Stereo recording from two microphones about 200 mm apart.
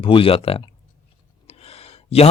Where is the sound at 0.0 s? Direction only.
25° left (ahead or behind).